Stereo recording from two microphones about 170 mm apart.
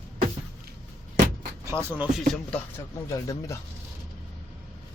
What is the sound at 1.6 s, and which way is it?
Speech, 15° right (ahead or behind).